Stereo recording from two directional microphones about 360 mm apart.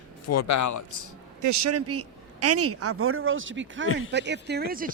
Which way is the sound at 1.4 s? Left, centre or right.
Right.